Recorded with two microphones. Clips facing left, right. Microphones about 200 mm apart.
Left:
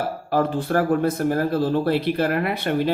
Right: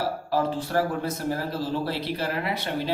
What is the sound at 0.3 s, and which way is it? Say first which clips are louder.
Speech: left 7 dB; 55° left (ahead or behind).